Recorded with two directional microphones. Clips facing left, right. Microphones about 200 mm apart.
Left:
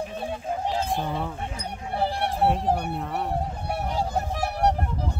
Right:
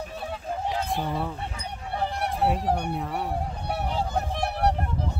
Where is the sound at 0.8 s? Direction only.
Centre (ahead or behind).